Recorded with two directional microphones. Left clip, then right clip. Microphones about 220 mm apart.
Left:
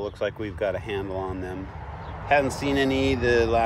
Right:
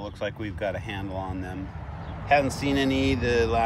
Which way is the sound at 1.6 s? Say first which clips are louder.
Left 2 dB; 10° left (ahead or behind).